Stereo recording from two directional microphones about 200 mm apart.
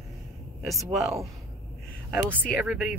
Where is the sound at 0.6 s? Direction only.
Centre (ahead or behind).